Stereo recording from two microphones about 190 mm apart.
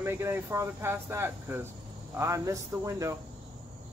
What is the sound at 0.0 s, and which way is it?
Speech, 15° right (ahead or behind).